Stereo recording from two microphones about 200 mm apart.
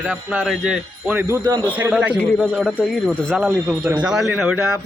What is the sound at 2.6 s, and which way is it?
Speech, 5° left (ahead or behind).